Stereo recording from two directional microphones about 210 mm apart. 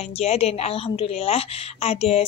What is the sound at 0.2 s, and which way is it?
A woman's voice, 30° left (ahead or behind).